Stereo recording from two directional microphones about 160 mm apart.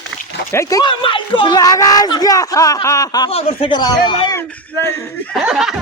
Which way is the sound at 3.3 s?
40° left (ahead or behind).